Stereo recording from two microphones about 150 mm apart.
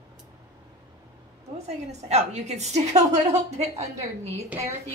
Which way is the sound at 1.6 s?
45° right (ahead or behind).